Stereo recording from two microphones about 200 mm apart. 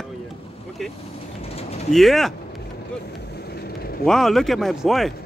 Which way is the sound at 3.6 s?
50° left (ahead or behind).